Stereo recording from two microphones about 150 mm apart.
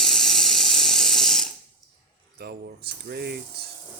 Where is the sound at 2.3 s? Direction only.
90° right.